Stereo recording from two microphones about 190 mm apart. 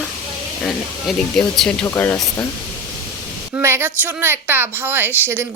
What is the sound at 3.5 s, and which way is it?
Speech, 10° right (ahead or behind).